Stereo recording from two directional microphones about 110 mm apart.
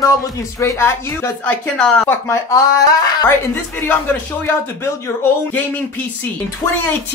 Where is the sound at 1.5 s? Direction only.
10° left (ahead or behind).